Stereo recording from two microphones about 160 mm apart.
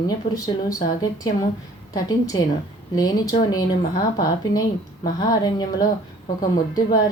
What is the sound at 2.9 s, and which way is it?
Speech, 25° left (ahead or behind).